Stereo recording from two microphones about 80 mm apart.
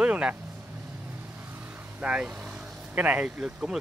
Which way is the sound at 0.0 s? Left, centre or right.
Centre.